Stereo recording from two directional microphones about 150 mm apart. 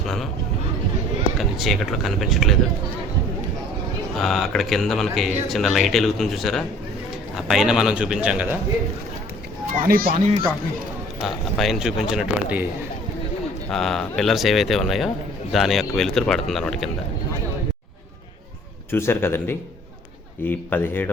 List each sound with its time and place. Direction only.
0.0 s speech: centre (ahead or behind)
1.4 s speech: centre (ahead or behind)
4.2 s speech: centre (ahead or behind)
9.7 s speech: 80° right
11.2 s speech: centre (ahead or behind)
13.7 s speech: 5° left (ahead or behind)
18.9 s a man's voice: 15° left (ahead or behind)